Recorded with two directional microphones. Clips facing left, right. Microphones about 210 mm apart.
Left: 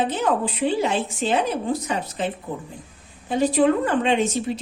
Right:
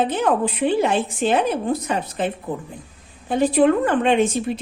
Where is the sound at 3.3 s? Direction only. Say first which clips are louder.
Right 2 dB; 55° right (ahead or behind).